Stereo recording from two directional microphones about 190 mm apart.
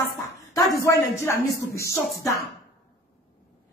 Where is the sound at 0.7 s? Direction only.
15° left (ahead or behind).